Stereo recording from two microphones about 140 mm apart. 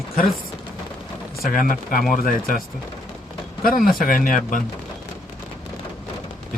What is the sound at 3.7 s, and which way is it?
Speech, 90° left.